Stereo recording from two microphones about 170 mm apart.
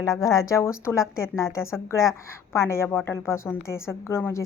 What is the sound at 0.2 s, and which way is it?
A woman's voice, 20° left (ahead or behind).